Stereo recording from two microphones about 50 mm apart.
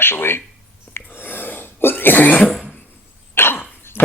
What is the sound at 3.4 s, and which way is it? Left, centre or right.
Cough, left.